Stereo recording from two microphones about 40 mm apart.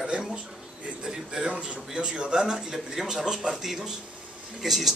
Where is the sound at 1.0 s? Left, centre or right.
Centre.